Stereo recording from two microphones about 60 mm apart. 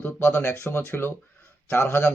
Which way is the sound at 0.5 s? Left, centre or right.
Left.